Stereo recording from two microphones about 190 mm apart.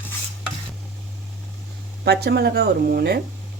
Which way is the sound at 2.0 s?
60° right (ahead or behind).